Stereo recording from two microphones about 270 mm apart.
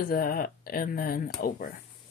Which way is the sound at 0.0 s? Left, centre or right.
Left.